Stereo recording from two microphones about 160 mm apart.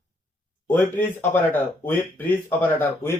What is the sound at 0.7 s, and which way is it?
Speech, 10° left (ahead or behind).